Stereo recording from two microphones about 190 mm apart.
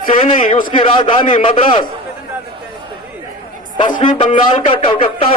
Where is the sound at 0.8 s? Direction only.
25° left (ahead or behind).